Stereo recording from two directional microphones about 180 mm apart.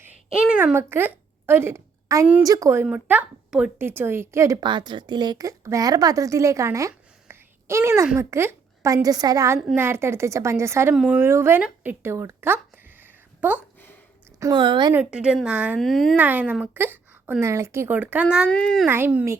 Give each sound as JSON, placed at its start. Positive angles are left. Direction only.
{"t": 0.0, "sound": "a sound", "side_deg": -5}
{"t": 2.4, "sound": "a woman's voice", "side_deg": -20}
{"t": 13.6, "sound": "a sound", "side_deg": 10}
{"t": 14.3, "sound": "speech", "side_deg": -20}
{"t": 14.9, "sound": "a woman's voice", "side_deg": -5}
{"t": 16.1, "sound": "a woman's voice", "side_deg": -10}
{"t": 18.9, "sound": "a woman's voice", "side_deg": -10}